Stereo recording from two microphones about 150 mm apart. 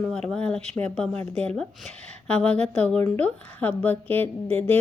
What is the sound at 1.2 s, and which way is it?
Speech, 45° right (ahead or behind).